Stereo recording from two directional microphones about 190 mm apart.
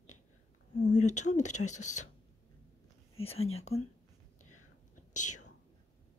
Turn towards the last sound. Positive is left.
turn(degrees=40)  # may be behind; listen again after turning